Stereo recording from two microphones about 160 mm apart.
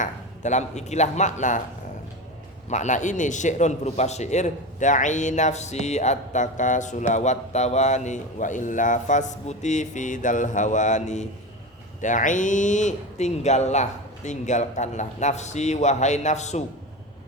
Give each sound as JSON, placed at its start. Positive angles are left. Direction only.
{"t": 0.0, "sound": "speech", "side_deg": 50}
{"t": 2.6, "sound": "a man's voice", "side_deg": 50}